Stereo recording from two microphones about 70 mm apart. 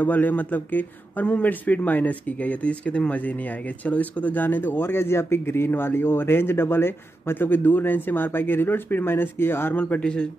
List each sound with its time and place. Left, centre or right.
0.0 s speech: left